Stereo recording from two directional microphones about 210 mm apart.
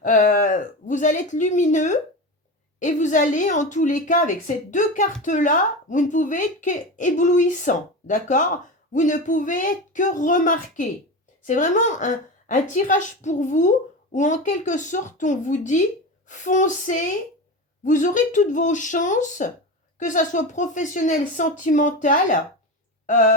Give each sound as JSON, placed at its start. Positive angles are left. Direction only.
{"t": 0.0, "sound": "a woman's voice", "side_deg": 40}